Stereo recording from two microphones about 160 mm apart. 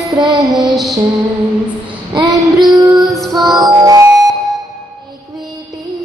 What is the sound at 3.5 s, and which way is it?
Music, 25° right (ahead or behind).